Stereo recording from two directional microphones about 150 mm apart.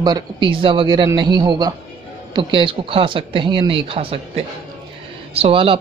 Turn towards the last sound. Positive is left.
turn(degrees=-40)  # may be behind; listen again after turning